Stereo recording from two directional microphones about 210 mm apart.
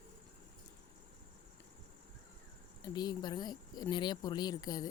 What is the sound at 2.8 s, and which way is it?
Speech, 20° left (ahead or behind).